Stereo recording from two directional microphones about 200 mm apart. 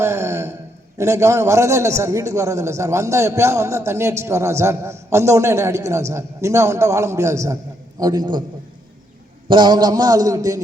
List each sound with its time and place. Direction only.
0.0 s a sound: 15° right (ahead or behind)
0.9 s a man's voice: 15° right (ahead or behind)
9.5 s a man's voice: 20° right (ahead or behind)